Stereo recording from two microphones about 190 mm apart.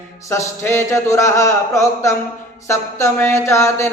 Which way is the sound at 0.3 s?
15° left (ahead or behind).